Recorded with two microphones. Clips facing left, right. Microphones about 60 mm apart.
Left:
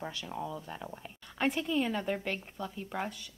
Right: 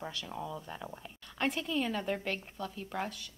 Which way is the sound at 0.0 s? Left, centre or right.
Centre.